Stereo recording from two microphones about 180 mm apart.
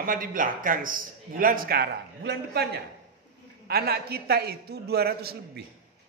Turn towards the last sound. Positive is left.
turn(degrees=-60)  # may be behind; listen again after turning